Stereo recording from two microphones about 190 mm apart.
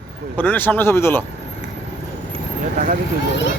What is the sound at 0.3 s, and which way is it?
Speech, 10° left (ahead or behind).